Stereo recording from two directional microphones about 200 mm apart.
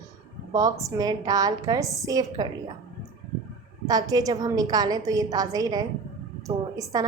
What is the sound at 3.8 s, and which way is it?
A woman's voice, 20° right (ahead or behind).